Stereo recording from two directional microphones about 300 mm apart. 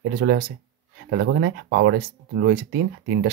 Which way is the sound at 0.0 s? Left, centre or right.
Right.